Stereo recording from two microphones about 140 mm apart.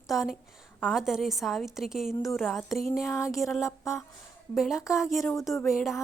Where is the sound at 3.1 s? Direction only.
20° left (ahead or behind).